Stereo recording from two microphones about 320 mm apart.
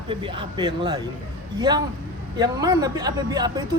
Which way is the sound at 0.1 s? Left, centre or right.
Centre.